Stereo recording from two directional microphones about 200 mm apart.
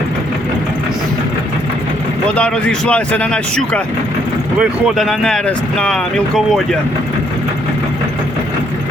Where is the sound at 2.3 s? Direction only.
5° left (ahead or behind).